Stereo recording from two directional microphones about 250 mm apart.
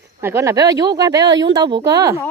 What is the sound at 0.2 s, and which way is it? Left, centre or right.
Speech, centre.